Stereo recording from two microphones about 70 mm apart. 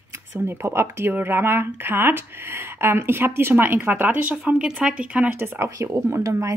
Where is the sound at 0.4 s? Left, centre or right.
Right.